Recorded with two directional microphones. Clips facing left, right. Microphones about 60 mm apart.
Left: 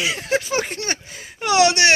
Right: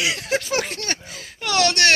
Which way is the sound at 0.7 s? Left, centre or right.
Centre.